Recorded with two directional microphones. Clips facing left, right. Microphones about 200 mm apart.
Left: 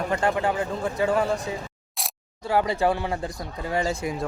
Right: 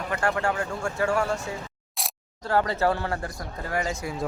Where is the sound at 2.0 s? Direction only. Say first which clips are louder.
Left 1 dB; centre (ahead or behind).